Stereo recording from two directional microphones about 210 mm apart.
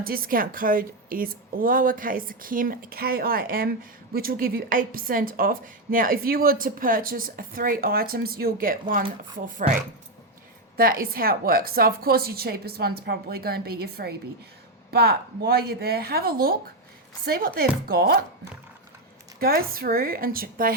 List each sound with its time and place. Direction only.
0.0 s a woman's voice: 45° right (ahead or behind)
10.8 s a woman's voice: 45° right (ahead or behind)
19.4 s a woman's voice: 45° right (ahead or behind)